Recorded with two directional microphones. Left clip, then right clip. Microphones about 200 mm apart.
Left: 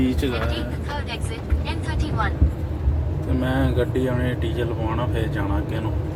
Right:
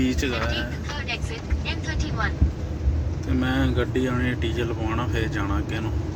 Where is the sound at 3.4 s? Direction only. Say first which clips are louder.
Left 2 dB; 5° left (ahead or behind).